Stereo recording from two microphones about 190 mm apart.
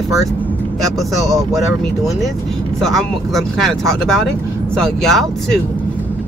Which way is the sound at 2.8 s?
Centre (ahead or behind).